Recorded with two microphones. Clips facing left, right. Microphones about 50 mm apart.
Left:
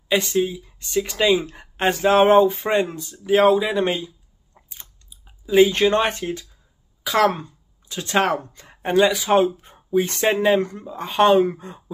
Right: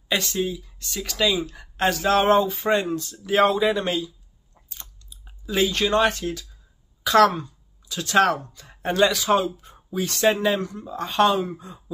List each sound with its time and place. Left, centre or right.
0.1 s speech: centre
1.3 s speech: left
3.3 s speech: centre
3.7 s speech: left
4.6 s chewing: left
5.5 s speech: left
7.0 s throat clearing: centre
7.2 s speech: left
9.4 s speech: left
10.9 s speech: centre
11.2 s speech: left